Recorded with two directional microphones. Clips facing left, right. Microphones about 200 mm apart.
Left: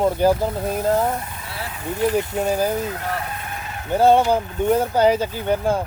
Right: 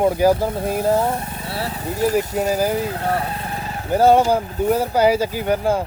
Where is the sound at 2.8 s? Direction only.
35° right (ahead or behind).